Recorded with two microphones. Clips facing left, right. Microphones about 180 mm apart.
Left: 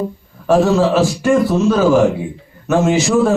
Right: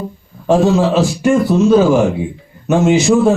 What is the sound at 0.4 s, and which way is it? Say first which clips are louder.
A man's voice: right 1 dB; 20° right (ahead or behind).